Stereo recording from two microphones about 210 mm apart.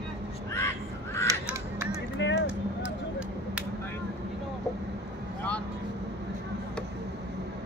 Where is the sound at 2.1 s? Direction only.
60° left (ahead or behind).